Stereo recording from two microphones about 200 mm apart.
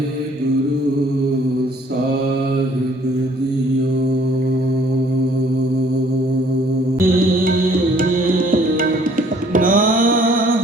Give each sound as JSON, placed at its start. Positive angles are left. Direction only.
{"t": 7.9, "sound": "music", "side_deg": -45}